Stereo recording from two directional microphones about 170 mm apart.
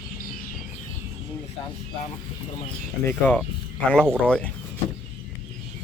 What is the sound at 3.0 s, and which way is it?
Speech, 10° left (ahead or behind).